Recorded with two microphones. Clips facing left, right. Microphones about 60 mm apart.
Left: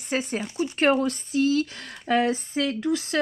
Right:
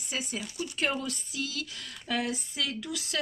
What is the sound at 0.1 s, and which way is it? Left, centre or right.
Speech, left.